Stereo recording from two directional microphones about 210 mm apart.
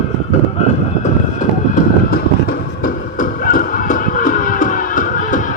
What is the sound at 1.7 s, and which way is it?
Music, 45° left (ahead or behind).